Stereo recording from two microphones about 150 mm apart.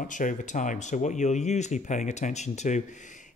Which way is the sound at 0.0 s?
60° left (ahead or behind).